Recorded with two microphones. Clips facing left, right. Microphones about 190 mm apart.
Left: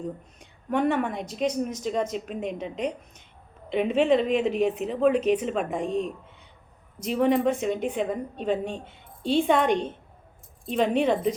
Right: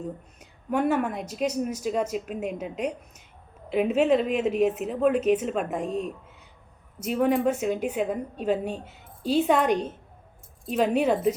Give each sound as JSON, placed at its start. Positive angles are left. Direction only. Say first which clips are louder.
{"t": 0.0, "sound": "a woman's voice", "louder": "left 1 dB", "side_deg": -5}